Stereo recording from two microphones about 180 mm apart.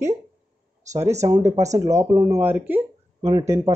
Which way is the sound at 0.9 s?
40° right (ahead or behind).